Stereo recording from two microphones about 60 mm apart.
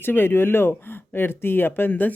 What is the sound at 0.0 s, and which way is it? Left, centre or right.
Speech, left.